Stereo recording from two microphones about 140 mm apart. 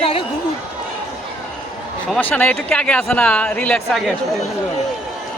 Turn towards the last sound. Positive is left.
turn(degrees=5)  # may be behind; listen again after turning